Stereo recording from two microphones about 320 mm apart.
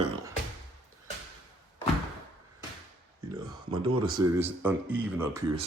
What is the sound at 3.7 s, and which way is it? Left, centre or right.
Speech, centre.